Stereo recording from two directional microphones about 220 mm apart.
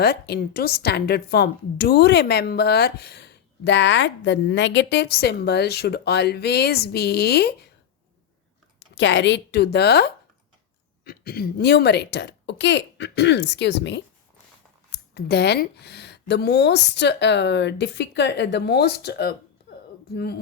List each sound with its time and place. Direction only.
0.0 s a woman's voice: 45° left (ahead or behind)
9.0 s a woman's voice: 55° left (ahead or behind)